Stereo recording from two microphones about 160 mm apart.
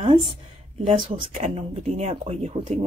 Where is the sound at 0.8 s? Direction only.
30° right (ahead or behind).